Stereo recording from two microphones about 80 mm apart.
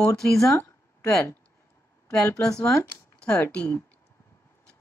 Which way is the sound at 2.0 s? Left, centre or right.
Left.